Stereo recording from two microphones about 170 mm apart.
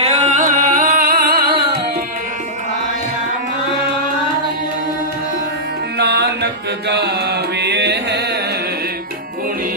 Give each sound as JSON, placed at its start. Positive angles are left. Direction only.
{"t": 0.0, "sound": "music", "side_deg": -40}
{"t": 6.0, "sound": "mantra", "side_deg": -80}